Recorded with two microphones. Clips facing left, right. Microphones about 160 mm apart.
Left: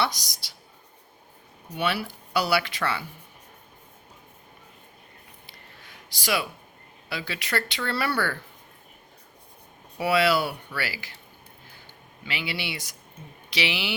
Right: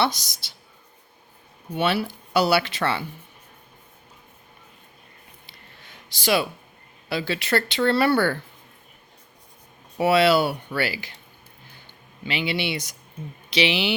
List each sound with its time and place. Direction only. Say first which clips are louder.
0.0 s speech: right 4 dB; 25° right (ahead or behind)
1.7 s speech: right 5 dB; 25° right (ahead or behind)
5.5 s a sound: even; 25° right (ahead or behind)
7.1 s speech: right 7 dB; 30° right (ahead or behind)
10.0 s speech: right 5 dB; 25° right (ahead or behind)
12.2 s speech: right 7 dB; 25° right (ahead or behind)